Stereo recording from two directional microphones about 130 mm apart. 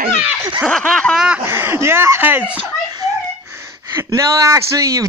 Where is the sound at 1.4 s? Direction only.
20° right (ahead or behind).